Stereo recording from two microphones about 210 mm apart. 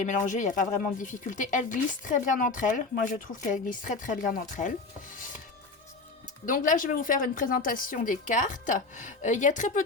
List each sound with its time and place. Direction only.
0.0 s speech: 35° left (ahead or behind)
6.4 s speech: 40° left (ahead or behind)